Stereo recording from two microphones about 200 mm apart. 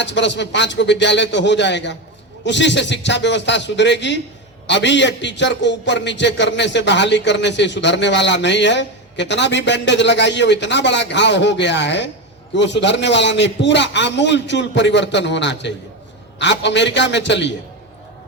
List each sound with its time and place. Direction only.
0.0 s a man's voice: 60° left (ahead or behind)